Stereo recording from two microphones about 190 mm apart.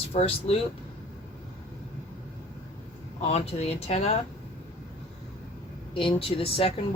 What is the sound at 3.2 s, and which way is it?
Speech, 35° left (ahead or behind).